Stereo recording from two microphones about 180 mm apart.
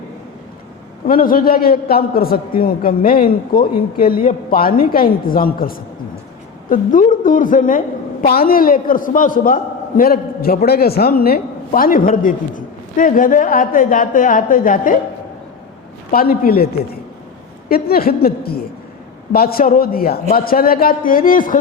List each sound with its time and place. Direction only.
1.0 s a man's voice: 50° left (ahead or behind)
16.1 s a woman's voice: 55° left (ahead or behind)
17.7 s a woman's voice: 55° left (ahead or behind)